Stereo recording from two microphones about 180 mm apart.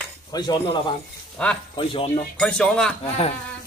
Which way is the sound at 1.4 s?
5° left (ahead or behind).